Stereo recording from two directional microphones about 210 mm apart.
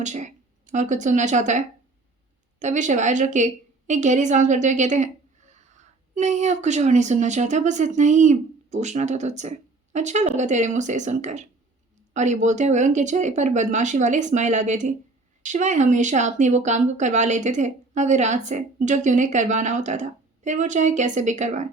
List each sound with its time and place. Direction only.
0.0 s a woman's voice: 35° right (ahead or behind)